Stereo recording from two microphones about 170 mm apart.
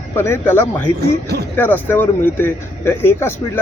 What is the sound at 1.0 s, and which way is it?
Speech, 70° right (ahead or behind).